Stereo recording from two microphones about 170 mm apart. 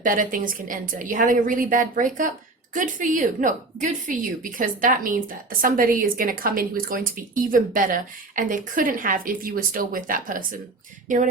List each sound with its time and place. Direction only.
0.0 s a woman's voice: 55° right (ahead or behind)